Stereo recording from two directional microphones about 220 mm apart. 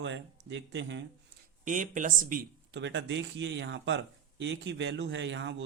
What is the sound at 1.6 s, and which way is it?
Speech, 35° right (ahead or behind).